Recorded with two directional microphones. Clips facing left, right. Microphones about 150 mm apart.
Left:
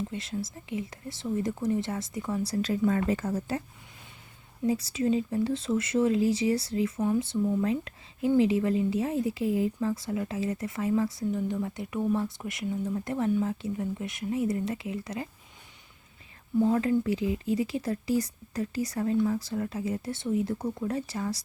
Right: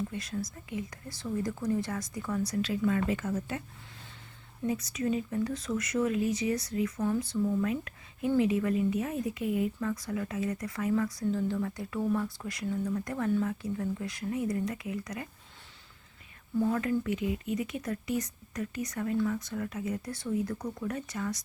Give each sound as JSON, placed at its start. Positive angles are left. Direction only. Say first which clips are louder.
{"t": 0.1, "sound": "speech", "louder": "left 2 dB", "side_deg": 25}
{"t": 4.6, "sound": "speech", "louder": "left 4 dB", "side_deg": 30}
{"t": 16.6, "sound": "speech", "louder": "left 4 dB", "side_deg": 25}